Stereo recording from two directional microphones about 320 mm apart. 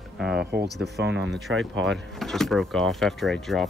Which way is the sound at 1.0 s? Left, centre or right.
Right.